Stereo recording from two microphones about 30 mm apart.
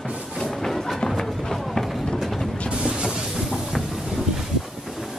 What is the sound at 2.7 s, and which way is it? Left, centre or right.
Music, right.